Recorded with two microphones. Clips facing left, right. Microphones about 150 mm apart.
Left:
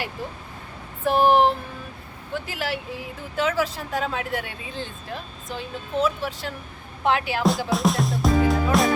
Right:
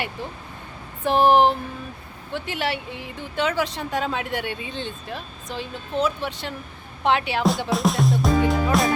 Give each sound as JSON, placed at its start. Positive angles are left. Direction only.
{"t": 1.0, "sound": "speech", "side_deg": 0}